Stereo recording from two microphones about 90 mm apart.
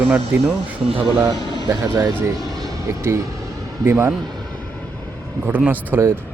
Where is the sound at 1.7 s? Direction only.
35° right (ahead or behind).